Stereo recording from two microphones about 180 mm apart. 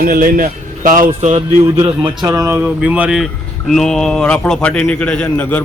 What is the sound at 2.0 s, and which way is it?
A man's voice, 20° right (ahead or behind).